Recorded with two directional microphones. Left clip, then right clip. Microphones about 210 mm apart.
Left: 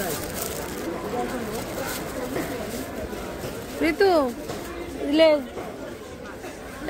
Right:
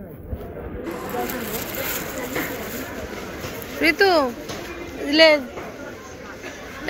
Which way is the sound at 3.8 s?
10° left (ahead or behind).